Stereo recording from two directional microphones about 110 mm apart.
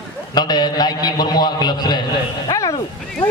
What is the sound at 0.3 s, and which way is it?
A man's voice, 40° left (ahead or behind).